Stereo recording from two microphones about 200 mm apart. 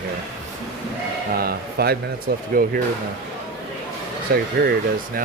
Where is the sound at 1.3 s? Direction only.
50° right (ahead or behind).